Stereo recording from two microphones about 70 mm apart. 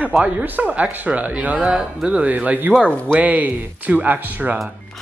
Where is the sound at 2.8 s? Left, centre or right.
Centre.